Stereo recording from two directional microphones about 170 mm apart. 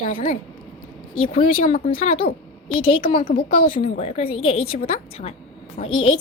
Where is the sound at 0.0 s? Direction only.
50° left (ahead or behind).